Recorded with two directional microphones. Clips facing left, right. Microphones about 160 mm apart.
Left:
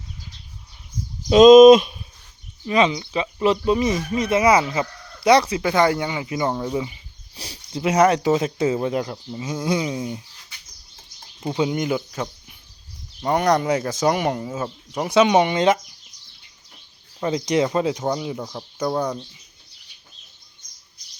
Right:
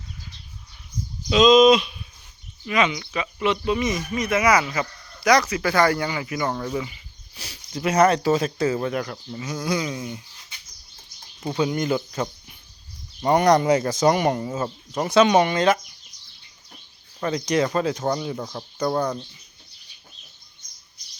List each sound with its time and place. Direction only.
1.3 s speech: 45° left (ahead or behind)
2.6 s speech: 30° left (ahead or behind)
9.4 s speech: 10° left (ahead or behind)
9.6 s speech: 30° left (ahead or behind)
11.4 s speech: 20° left (ahead or behind)
11.9 s speech: 5° left (ahead or behind); by 15.8 s 20° left (ahead or behind)
17.2 s speech: 20° left (ahead or behind)